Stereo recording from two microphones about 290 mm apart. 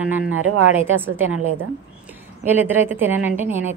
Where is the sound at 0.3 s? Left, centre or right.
Right.